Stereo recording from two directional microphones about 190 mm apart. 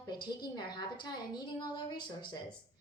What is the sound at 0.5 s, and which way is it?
A woman's voice, 25° left (ahead or behind).